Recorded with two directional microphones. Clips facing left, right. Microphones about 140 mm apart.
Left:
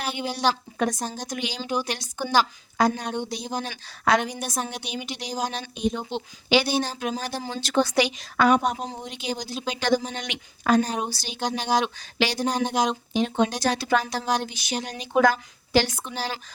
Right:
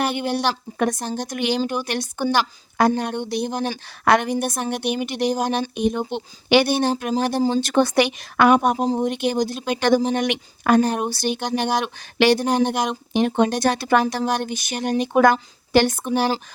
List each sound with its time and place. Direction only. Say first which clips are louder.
0.0 s speech: right 4 dB; 60° right (ahead or behind)